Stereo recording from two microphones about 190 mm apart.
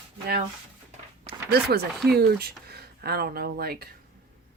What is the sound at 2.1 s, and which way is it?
Speech, 55° right (ahead or behind).